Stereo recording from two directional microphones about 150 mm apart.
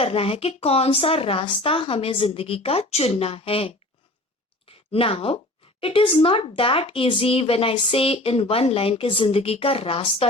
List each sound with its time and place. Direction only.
0.0 s speech: 40° left (ahead or behind)
4.6 s a sound: 40° left (ahead or behind)
5.8 s speech: 40° left (ahead or behind)